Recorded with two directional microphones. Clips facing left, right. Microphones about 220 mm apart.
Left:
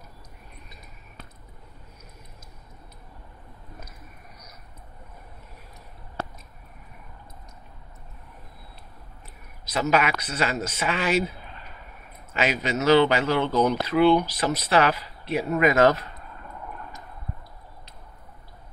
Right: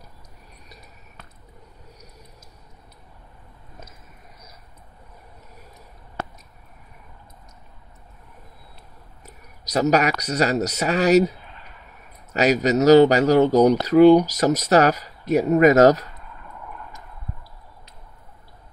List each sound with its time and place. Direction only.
9.2 s speech: 40° right (ahead or behind)